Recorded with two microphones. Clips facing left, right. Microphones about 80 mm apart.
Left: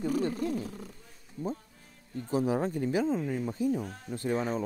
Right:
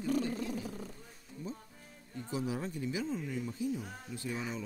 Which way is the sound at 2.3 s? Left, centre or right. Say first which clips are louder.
Left 8 dB; left.